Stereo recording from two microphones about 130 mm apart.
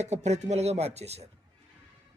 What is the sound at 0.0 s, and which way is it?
Speech, 60° right (ahead or behind).